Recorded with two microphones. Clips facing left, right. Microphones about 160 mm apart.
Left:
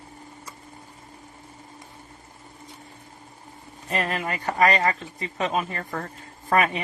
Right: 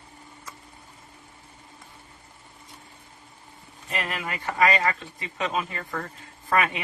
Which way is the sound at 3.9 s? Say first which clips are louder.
Left 4 dB; 35° left (ahead or behind).